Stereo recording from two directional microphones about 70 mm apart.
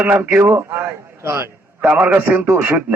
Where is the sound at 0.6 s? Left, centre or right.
Right.